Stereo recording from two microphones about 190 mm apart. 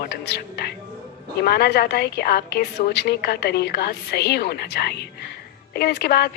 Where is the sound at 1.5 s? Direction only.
55° left (ahead or behind).